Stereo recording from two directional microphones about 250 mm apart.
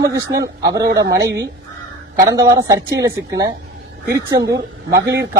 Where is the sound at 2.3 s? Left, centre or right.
Centre.